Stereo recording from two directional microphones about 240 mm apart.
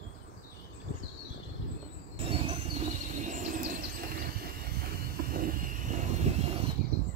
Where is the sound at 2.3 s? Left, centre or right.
Right.